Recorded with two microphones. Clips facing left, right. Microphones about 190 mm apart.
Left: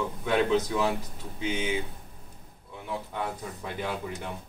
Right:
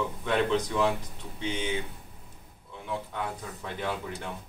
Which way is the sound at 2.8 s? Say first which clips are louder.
Left 1 dB; 10° left (ahead or behind).